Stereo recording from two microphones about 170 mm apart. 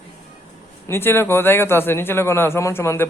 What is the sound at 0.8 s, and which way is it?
A man's voice, 15° left (ahead or behind).